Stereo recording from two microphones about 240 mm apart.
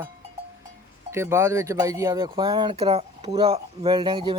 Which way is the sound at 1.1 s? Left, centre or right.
Centre.